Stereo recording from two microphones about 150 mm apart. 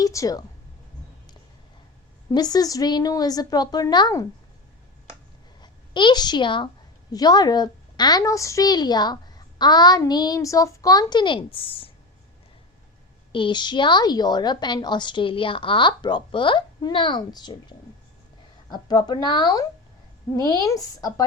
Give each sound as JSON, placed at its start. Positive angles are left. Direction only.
{"t": 0.0, "sound": "a woman's voice", "side_deg": 20}
{"t": 2.3, "sound": "a woman's voice", "side_deg": 25}
{"t": 5.5, "sound": "a child's voice", "side_deg": 30}
{"t": 13.3, "sound": "a woman's voice", "side_deg": 30}